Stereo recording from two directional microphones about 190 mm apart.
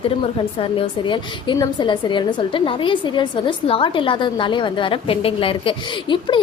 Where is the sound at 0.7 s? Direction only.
25° left (ahead or behind).